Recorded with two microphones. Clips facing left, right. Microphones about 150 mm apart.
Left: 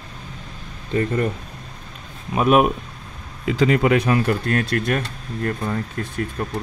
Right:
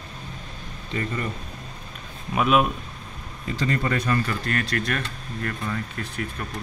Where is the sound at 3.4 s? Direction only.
90° left; by 4.7 s 60° left (ahead or behind).